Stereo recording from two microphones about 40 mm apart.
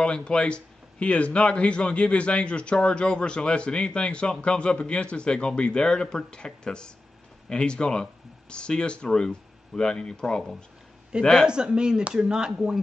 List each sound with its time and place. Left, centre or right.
0.0 s a man's voice: left
11.4 s speech: right